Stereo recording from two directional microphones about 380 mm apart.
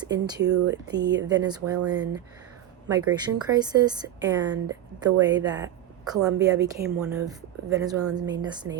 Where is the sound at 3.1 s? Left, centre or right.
Centre.